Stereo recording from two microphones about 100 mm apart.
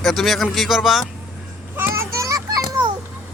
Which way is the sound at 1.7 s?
25° right (ahead or behind).